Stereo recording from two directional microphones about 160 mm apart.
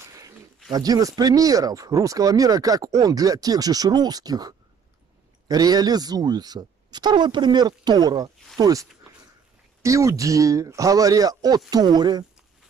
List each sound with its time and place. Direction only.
0.0 s a sound: 20° right (ahead or behind)
0.7 s speech: 25° right (ahead or behind)
9.8 s speech: 20° right (ahead or behind)